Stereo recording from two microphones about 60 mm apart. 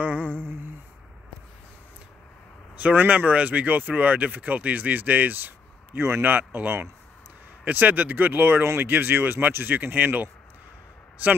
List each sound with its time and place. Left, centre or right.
0.0 s humming: right
2.7 s speech: right
5.9 s a man's voice: right
6.2 s speech: right